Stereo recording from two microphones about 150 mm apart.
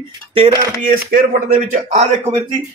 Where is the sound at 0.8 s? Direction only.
60° right (ahead or behind).